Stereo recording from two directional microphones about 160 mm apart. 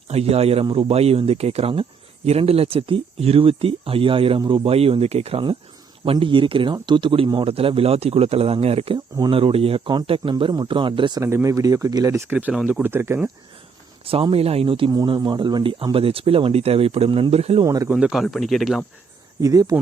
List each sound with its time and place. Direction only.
0.1 s speech: 40° right (ahead or behind)
11.2 s speech: 20° right (ahead or behind)
14.0 s speech: 35° right (ahead or behind)
17.6 s speech: 20° right (ahead or behind)
17.9 s speech: centre (ahead or behind)
19.4 s speech: 20° right (ahead or behind)